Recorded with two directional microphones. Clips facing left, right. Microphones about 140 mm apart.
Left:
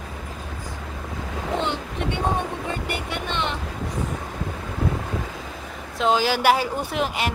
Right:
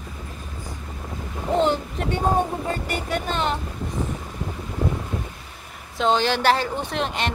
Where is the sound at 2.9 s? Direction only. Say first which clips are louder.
Right 2 dB; 40° right (ahead or behind).